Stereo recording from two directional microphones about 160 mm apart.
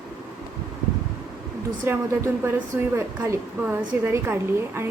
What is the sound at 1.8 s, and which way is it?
A woman's voice, 15° right (ahead or behind).